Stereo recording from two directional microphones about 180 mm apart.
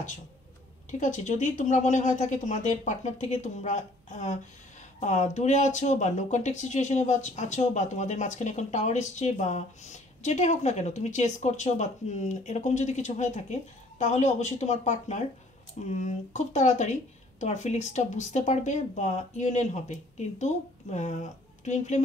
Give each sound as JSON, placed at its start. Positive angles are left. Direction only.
{"t": 0.9, "sound": "speech", "side_deg": 45}